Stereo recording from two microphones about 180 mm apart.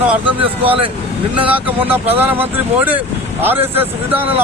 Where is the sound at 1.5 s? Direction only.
10° right (ahead or behind).